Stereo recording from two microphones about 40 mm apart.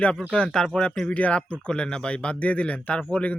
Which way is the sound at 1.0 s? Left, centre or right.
Left.